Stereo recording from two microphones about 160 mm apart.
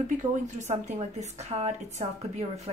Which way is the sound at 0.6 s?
45° right (ahead or behind).